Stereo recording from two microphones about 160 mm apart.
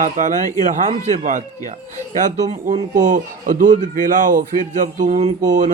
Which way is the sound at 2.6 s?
55° right (ahead or behind).